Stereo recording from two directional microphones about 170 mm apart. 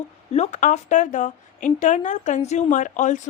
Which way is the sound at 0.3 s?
40° left (ahead or behind).